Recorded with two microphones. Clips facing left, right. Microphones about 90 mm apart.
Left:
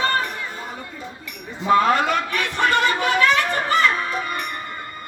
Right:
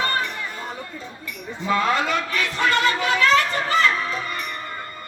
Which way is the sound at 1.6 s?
50° left (ahead or behind).